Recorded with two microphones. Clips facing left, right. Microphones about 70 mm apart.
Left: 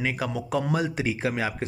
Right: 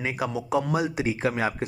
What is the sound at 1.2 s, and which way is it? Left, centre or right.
Speech, right.